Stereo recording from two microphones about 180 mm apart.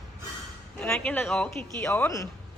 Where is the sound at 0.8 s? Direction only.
5° left (ahead or behind).